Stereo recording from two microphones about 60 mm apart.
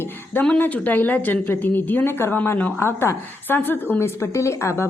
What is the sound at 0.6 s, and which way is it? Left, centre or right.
A woman's voice, left.